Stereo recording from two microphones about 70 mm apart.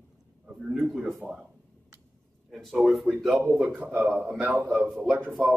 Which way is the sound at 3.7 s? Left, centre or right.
Right.